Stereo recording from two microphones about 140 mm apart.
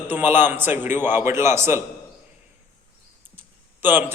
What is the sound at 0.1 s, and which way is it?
A man's voice, 15° right (ahead or behind).